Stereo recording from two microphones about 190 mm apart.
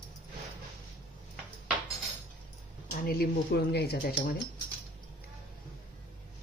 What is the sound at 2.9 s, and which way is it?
Speech, 50° left (ahead or behind).